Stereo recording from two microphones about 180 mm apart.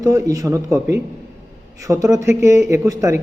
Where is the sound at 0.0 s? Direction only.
20° right (ahead or behind).